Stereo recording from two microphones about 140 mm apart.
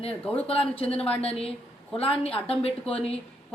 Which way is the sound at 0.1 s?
10° left (ahead or behind).